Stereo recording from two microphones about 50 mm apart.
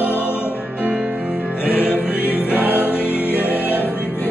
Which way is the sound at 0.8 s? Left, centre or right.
Right.